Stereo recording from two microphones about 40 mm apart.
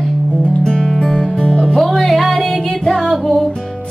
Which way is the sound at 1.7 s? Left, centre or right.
Centre.